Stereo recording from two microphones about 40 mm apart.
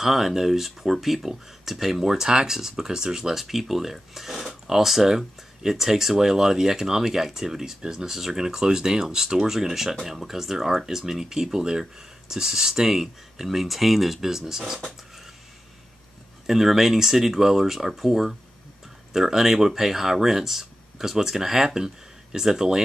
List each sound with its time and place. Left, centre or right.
0.0 s speech: centre
2.0 s speech: centre
16.4 s speech: centre